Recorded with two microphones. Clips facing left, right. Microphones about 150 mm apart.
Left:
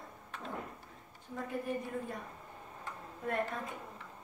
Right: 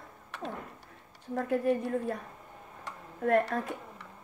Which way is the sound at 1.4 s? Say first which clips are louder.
Right 9 dB; 75° right (ahead or behind).